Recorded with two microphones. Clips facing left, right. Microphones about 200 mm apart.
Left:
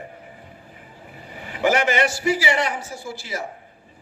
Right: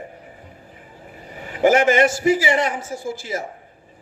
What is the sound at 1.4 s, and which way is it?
A man's voice, 45° right (ahead or behind).